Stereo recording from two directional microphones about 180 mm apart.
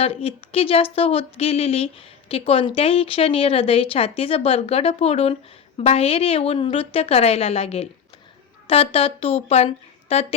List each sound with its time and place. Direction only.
0.0 s a woman's voice: 30° left (ahead or behind)